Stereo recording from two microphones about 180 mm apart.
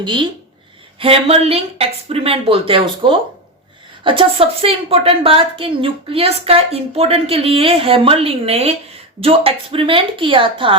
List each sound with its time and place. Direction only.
0.0 s a woman's voice: 25° right (ahead or behind)